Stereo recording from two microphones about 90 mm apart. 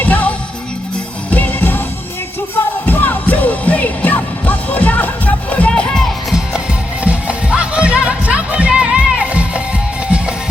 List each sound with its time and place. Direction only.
0.0 s music: 20° left (ahead or behind)
2.8 s music: 20° left (ahead or behind); by 6.4 s 5° left (ahead or behind)
7.0 s music: 15° right (ahead or behind)